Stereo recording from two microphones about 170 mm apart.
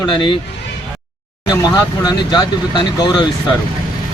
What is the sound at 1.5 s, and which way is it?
Speech, 20° left (ahead or behind).